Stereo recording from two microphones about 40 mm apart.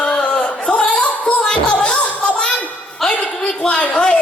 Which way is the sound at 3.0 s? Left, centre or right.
Centre.